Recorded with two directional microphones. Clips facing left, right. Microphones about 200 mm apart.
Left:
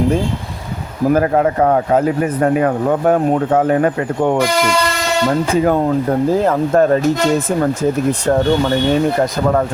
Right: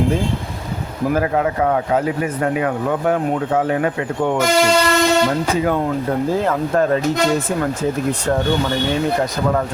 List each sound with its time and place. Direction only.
1.1 s speech: 45° left (ahead or behind)
6.4 s speech: 40° left (ahead or behind)